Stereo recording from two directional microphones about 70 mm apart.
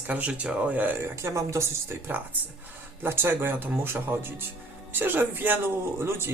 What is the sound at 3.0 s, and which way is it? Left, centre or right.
Speech, right.